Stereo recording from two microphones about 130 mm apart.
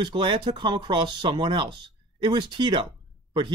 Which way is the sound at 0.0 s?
40° right (ahead or behind).